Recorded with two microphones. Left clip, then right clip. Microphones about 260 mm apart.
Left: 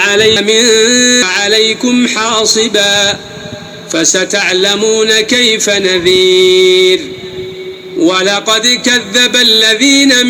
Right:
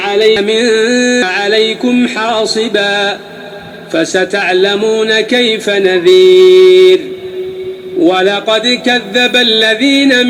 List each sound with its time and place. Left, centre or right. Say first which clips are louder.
0.0 s music: left 1 dB; left
0.3 s a man's voice: left 2 dB; centre
8.0 s a man's voice: even; centre